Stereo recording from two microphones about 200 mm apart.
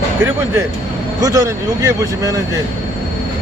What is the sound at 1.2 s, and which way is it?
Speech, 15° right (ahead or behind).